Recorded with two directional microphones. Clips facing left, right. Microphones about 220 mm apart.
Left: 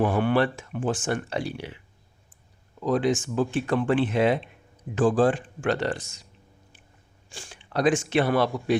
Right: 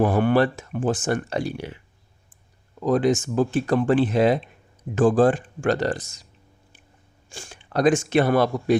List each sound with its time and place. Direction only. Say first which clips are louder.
0.0 s speech: right 3 dB; 45° right (ahead or behind)
2.8 s speech: right 3 dB; 45° right (ahead or behind)
7.3 s speech: right 3 dB; 45° right (ahead or behind)